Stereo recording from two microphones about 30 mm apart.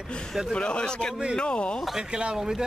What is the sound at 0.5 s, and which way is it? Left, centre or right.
Speech, left.